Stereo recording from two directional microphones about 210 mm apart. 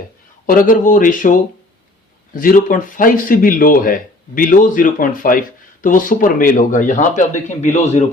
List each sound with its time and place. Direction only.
0.4 s speech: 40° left (ahead or behind)